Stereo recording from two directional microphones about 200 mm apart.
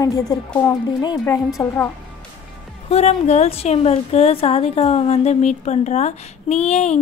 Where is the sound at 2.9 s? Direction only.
35° left (ahead or behind).